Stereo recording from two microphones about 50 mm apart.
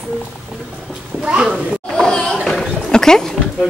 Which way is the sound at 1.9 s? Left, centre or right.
Centre.